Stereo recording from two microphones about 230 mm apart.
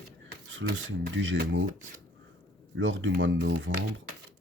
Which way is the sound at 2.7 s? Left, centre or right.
Right.